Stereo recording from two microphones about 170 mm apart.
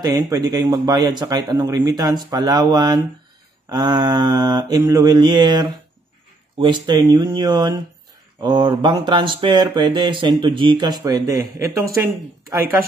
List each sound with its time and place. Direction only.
0.0 s speech: 20° right (ahead or behind)